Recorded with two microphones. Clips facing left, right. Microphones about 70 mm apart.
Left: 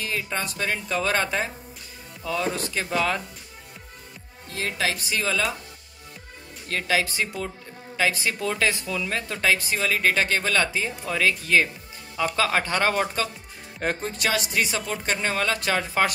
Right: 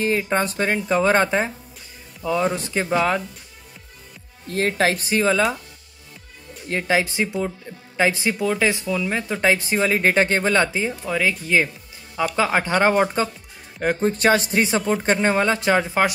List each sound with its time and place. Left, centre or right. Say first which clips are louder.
0.0 s speech: right 8 dB; right
4.5 s speech: right 7 dB; right
6.7 s speech: right 4 dB; right
8.4 s speech: right 4 dB; centre
9.4 s speech: right 4 dB; right
11.1 s speech: even; centre